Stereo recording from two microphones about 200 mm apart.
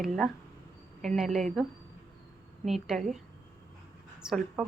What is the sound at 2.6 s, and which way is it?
A woman's voice, centre (ahead or behind).